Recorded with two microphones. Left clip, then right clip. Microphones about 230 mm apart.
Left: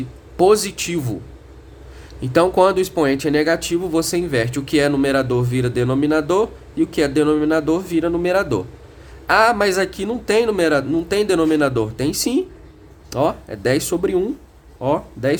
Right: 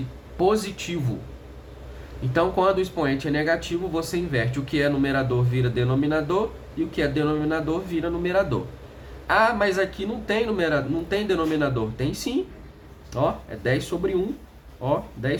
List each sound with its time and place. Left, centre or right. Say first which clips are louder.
0.3 s speech: left 8 dB; left
2.3 s speech: left 7 dB; left